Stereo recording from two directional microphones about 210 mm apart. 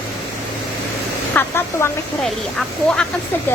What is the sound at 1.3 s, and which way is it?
Speech, 10° left (ahead or behind).